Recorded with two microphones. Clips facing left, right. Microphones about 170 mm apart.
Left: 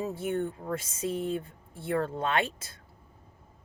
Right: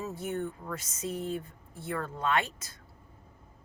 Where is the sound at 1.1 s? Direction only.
30° left (ahead or behind).